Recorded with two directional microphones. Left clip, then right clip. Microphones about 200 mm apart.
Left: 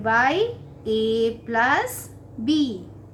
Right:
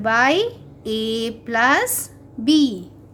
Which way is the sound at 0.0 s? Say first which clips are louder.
Right 3 dB; 45° right (ahead or behind).